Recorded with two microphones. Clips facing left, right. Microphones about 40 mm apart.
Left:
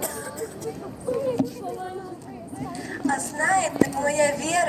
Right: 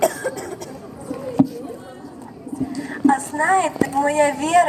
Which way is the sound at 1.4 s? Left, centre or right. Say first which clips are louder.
Right 8 dB; right.